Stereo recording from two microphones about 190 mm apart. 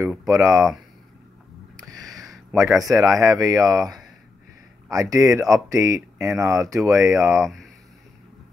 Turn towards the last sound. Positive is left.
turn(degrees=0)  # may be behind; listen again after turning